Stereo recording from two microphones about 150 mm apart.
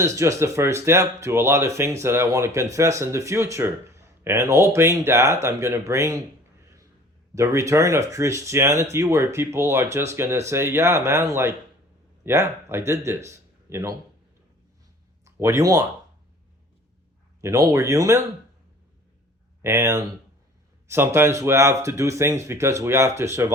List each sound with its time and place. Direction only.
0.0 s speech: 20° right (ahead or behind)
7.3 s speech: 20° right (ahead or behind)
15.2 s speech: 20° right (ahead or behind)
17.4 s speech: 20° right (ahead or behind)
19.6 s speech: 15° right (ahead or behind)